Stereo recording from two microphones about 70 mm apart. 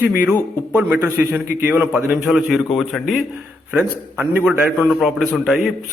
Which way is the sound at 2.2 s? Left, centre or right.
Centre.